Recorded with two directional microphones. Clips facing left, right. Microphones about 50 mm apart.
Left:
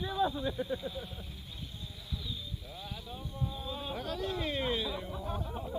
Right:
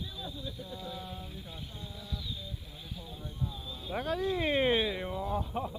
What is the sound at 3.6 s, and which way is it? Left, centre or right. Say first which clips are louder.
Music: left 4 dB; left.